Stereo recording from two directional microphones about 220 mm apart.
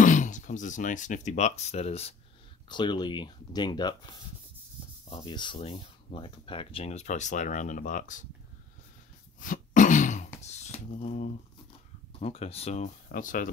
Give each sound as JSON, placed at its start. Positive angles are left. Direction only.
{"t": 0.0, "sound": "speech", "side_deg": 35}
{"t": 5.1, "sound": "speech", "side_deg": 20}
{"t": 9.4, "sound": "throat clearing", "side_deg": 35}
{"t": 10.4, "sound": "a sound", "side_deg": 30}
{"t": 12.1, "sound": "speech", "side_deg": 25}